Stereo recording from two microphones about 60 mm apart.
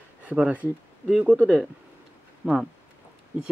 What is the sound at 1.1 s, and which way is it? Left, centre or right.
Speech, right.